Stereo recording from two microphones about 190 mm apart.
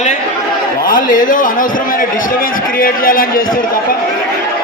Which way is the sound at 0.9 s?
45° left (ahead or behind).